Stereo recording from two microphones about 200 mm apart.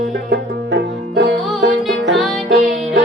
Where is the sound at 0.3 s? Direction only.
55° right (ahead or behind).